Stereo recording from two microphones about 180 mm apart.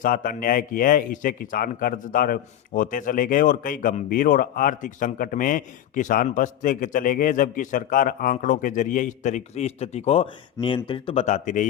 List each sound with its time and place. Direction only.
0.0 s speech: 45° left (ahead or behind)